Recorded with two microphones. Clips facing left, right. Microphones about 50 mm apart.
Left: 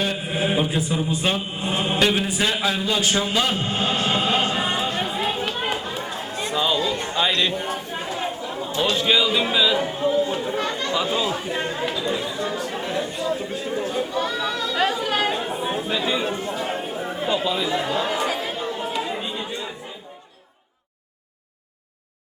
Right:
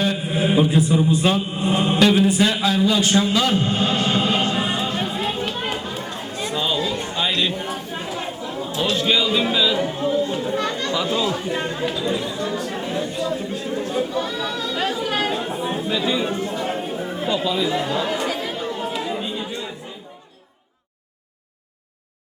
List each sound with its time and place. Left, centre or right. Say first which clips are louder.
0.3 s a man's voice: right 5 dB; left
4.2 s chatter: right 1 dB; centre
10.3 s speech: right 2 dB; centre
14.9 s chatter: even; centre
16.0 s speech: right 3 dB; centre
16.2 s speech: right 2 dB; centre
18.9 s chatter: right 1 dB; centre